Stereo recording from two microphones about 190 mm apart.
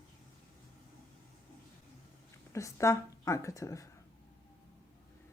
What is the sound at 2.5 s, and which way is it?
A woman's voice, 15° left (ahead or behind).